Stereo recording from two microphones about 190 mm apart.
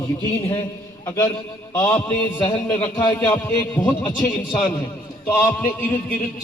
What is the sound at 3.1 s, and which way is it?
Speech, 15° left (ahead or behind).